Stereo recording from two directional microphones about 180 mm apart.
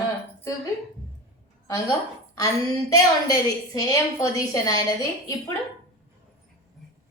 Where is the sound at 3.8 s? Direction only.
20° left (ahead or behind).